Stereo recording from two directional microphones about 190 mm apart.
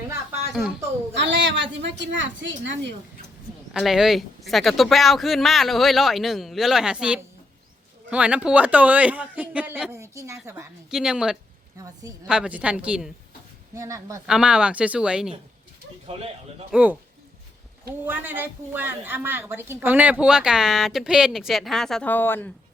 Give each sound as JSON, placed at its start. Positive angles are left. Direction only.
{"t": 1.1, "sound": "a woman's voice", "side_deg": -70}
{"t": 3.7, "sound": "a woman's voice", "side_deg": 0}
{"t": 10.9, "sound": "a woman's voice", "side_deg": -5}
{"t": 11.8, "sound": "a man's voice", "side_deg": -20}
{"t": 12.3, "sound": "a woman's voice", "side_deg": -5}
{"t": 13.7, "sound": "a man's voice", "side_deg": -15}
{"t": 14.3, "sound": "a woman's voice", "side_deg": -5}
{"t": 16.0, "sound": "speech", "side_deg": -30}
{"t": 16.7, "sound": "a man's voice", "side_deg": -10}
{"t": 18.0, "sound": "a woman's voice", "side_deg": -10}